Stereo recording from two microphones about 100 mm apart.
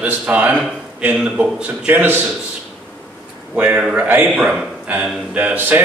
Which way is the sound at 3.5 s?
15° right (ahead or behind).